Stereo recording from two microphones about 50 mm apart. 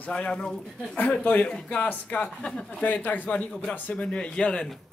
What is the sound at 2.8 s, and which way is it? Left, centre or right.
Speech, left.